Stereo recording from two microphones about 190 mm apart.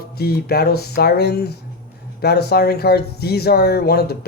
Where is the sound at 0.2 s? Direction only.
55° left (ahead or behind).